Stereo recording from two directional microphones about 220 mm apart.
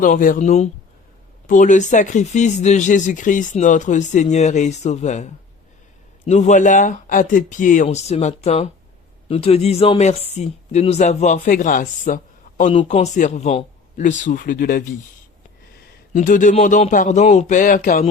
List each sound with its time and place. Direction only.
0.0 s speech: 35° left (ahead or behind)
16.1 s speech: 35° left (ahead or behind)